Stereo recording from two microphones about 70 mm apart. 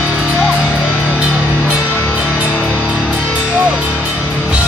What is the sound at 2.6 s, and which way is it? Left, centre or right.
Music, centre.